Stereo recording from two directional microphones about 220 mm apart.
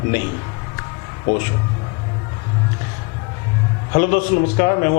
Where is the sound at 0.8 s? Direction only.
20° left (ahead or behind).